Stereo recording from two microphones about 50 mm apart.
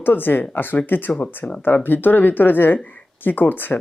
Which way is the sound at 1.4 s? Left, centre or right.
Left.